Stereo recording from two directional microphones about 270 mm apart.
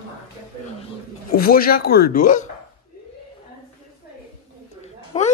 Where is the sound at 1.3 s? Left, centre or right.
Left.